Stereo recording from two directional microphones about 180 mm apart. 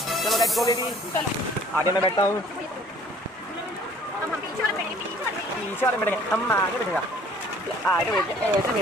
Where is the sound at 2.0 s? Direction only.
25° left (ahead or behind).